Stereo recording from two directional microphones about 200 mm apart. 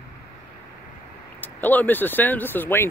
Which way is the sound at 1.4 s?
10° left (ahead or behind).